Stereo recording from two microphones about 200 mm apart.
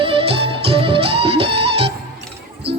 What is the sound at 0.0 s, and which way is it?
Music, 25° right (ahead or behind).